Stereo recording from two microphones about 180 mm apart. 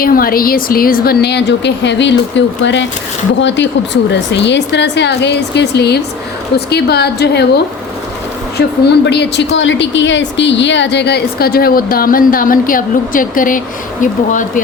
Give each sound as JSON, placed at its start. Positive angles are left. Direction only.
{"t": 0.0, "sound": "a woman's voice", "side_deg": 55}
{"t": 9.0, "sound": "a woman's voice", "side_deg": 70}